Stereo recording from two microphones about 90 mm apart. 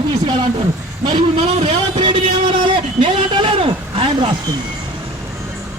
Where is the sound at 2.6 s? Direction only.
70° right (ahead or behind).